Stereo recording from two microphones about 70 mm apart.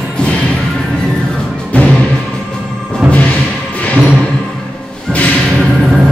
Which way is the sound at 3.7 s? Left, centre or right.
Centre.